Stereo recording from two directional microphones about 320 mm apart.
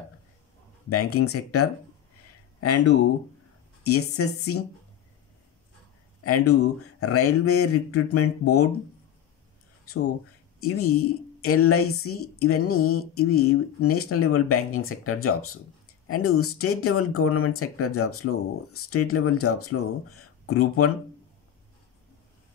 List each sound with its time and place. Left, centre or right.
0.8 s a woman's voice: left
3.8 s a woman's voice: left
6.2 s a woman's voice: left
10.6 s a woman's voice: left